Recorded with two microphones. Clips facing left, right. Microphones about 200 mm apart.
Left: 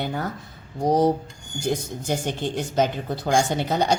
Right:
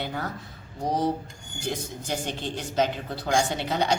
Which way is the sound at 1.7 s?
45° left (ahead or behind).